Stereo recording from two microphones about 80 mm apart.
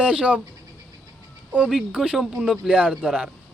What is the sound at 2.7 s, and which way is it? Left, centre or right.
Speech, centre.